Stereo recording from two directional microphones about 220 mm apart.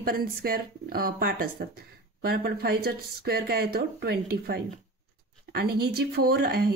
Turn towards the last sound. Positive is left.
turn(degrees=-45)  # may be behind; listen again after turning